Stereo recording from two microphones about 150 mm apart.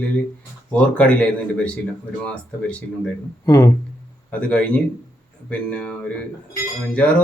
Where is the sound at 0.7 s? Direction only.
10° left (ahead or behind).